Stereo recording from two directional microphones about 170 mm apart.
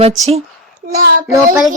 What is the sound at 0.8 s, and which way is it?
Child singing, 60° right (ahead or behind).